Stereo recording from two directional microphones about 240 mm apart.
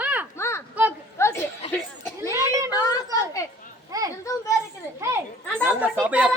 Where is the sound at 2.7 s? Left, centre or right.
Centre.